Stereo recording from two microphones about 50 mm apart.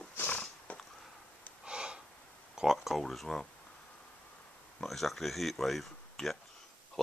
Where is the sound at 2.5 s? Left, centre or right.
Centre.